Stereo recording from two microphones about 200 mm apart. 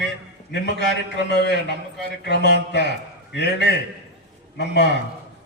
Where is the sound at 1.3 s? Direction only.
55° left (ahead or behind).